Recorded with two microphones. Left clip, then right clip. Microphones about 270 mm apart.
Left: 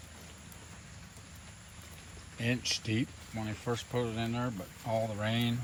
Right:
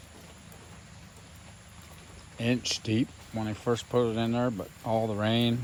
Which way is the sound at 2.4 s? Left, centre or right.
Centre.